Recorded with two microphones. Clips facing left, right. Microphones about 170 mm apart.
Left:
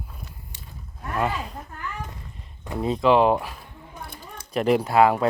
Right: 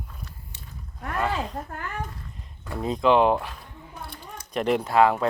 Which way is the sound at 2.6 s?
15° left (ahead or behind).